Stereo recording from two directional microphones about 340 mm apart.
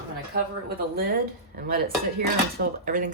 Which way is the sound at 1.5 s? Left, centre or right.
Right.